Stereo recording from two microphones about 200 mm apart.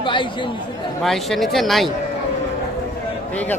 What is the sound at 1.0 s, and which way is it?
Speech, centre (ahead or behind).